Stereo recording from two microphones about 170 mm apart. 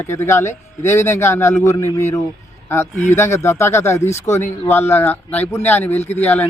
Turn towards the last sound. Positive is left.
turn(degrees=10)  # may be behind; listen again after turning